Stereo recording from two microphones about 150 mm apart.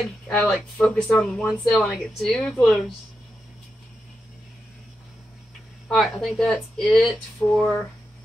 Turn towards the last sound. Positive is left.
turn(degrees=5)  # may be behind; listen again after turning